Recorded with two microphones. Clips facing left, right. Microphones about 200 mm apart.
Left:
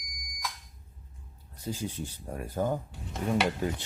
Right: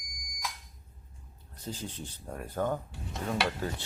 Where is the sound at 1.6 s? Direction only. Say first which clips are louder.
Left 5 dB; 10° left (ahead or behind).